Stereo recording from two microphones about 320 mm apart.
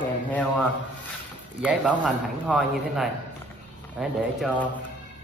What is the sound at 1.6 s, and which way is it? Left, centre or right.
A man's voice, centre.